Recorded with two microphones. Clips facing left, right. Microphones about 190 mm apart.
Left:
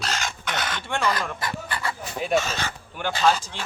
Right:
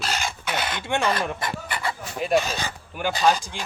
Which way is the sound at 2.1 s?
Centre (ahead or behind).